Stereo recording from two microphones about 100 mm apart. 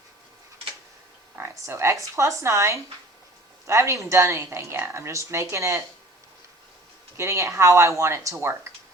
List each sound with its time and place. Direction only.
1.4 s a woman's voice: 25° right (ahead or behind)
7.2 s a woman's voice: 30° right (ahead or behind)